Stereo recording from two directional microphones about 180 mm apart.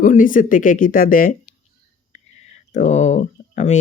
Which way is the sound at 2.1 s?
40° left (ahead or behind).